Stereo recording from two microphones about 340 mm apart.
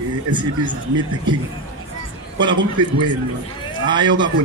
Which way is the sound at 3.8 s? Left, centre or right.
Centre.